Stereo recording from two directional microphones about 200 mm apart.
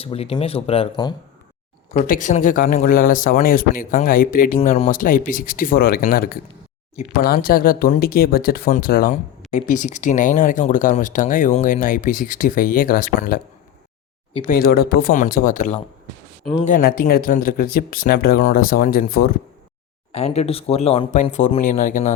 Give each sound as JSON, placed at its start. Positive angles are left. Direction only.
{"t": 0.0, "sound": "speech", "side_deg": 30}
{"t": 1.9, "sound": "a man's voice", "side_deg": 40}
{"t": 14.5, "sound": "a man's voice", "side_deg": 50}
{"t": 20.1, "sound": "speech", "side_deg": 30}